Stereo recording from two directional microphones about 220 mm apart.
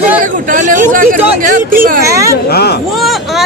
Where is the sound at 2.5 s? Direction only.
45° left (ahead or behind).